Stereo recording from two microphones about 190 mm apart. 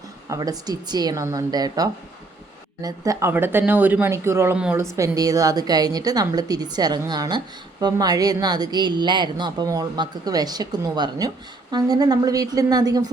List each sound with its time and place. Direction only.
0.3 s a woman's voice: 20° right (ahead or behind)